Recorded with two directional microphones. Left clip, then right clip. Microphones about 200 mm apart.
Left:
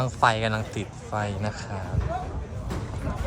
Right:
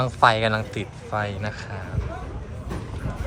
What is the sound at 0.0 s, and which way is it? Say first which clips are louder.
A man's voice: right 4 dB; 10° left (ahead or behind).